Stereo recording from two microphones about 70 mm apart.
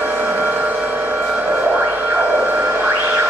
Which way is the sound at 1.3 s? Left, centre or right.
Right.